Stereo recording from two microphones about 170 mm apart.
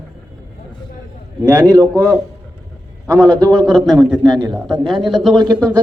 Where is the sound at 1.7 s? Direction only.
20° right (ahead or behind).